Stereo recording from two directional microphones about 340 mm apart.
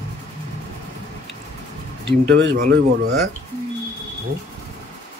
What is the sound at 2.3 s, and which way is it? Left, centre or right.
Speech, right.